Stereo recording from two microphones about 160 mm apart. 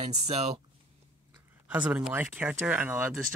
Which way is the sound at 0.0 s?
40° right (ahead or behind).